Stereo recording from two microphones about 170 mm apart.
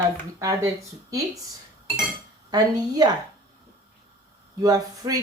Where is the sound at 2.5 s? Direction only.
25° right (ahead or behind).